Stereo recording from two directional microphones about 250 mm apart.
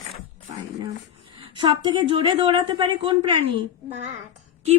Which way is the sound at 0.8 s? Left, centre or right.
Centre.